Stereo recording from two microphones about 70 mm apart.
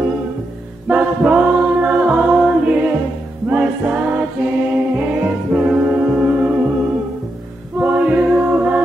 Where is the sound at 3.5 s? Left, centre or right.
Centre.